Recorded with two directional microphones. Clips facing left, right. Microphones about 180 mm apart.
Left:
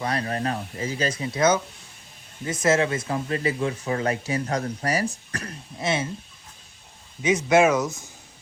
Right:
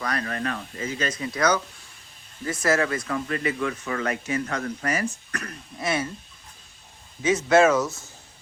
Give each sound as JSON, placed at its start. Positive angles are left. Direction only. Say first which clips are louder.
{"t": 0.0, "sound": "speech", "louder": "left 2 dB", "side_deg": 30}
{"t": 7.2, "sound": "speech", "louder": "even", "side_deg": 15}